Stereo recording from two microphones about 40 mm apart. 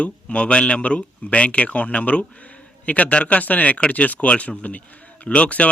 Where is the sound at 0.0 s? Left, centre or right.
Left.